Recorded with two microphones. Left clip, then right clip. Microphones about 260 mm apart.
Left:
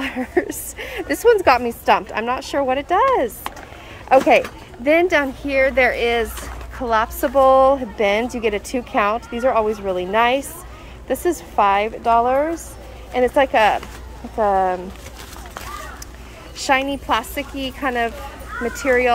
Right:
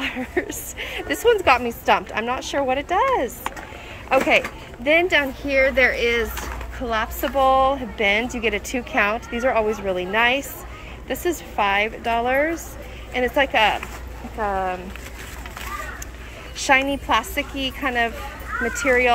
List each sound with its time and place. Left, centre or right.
0.0 s a sound: centre
0.7 s speech: centre
16.6 s speech: centre